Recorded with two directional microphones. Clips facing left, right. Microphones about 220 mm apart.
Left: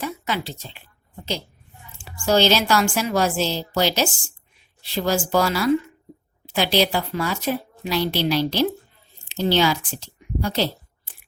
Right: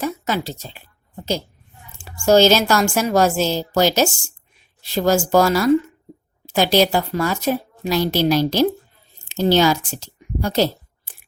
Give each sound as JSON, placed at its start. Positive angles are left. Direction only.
{"t": 0.0, "sound": "a woman's voice", "side_deg": -40}
{"t": 2.2, "sound": "a woman's voice", "side_deg": -45}
{"t": 9.3, "sound": "a sound", "side_deg": -45}